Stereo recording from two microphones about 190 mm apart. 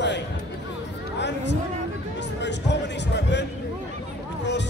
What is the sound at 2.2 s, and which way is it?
Music, 65° left (ahead or behind).